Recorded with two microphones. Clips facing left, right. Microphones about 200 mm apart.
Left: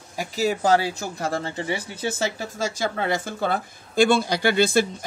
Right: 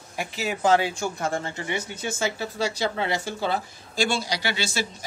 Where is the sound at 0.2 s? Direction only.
35° left (ahead or behind).